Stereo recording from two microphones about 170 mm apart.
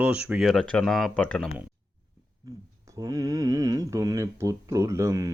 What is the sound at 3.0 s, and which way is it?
Speech, 20° right (ahead or behind).